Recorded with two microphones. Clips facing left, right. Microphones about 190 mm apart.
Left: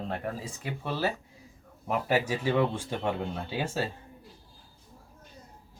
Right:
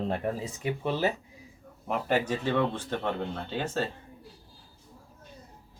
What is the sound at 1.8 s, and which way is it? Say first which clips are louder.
Speech: even; 5° left (ahead or behind).